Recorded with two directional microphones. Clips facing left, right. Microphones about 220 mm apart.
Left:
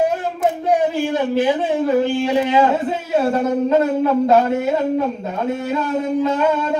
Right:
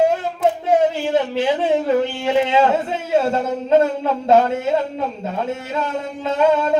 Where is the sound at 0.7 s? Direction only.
25° right (ahead or behind).